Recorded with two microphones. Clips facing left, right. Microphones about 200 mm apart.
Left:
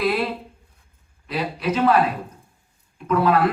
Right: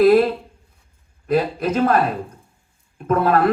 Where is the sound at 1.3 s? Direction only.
50° right (ahead or behind).